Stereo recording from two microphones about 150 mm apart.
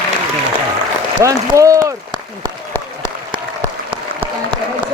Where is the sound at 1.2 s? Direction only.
20° right (ahead or behind).